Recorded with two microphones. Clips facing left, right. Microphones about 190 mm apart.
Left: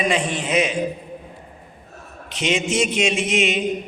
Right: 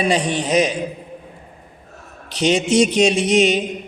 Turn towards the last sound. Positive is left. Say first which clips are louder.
# right 5 dB
turn(degrees=-35)  # may be behind; listen again after turning